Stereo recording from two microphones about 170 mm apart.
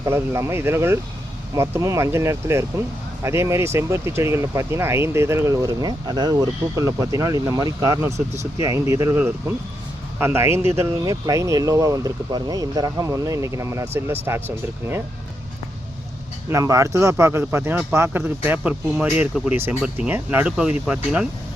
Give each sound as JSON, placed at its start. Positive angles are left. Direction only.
{"t": 0.0, "sound": "speech", "side_deg": -15}
{"t": 16.5, "sound": "speech", "side_deg": -20}